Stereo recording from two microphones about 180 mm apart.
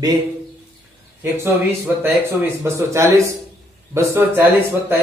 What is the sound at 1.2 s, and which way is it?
Speech, 15° right (ahead or behind).